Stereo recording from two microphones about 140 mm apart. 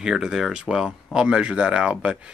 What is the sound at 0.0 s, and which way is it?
Speech, 5° right (ahead or behind).